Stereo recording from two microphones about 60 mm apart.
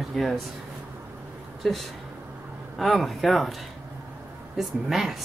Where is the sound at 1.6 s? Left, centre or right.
Centre.